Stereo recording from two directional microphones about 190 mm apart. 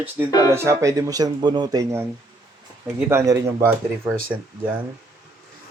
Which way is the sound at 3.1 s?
15° right (ahead or behind).